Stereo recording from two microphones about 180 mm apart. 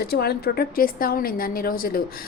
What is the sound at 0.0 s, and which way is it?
A woman's voice, 60° left (ahead or behind).